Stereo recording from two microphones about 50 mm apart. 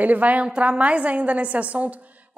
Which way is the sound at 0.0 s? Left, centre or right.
Right.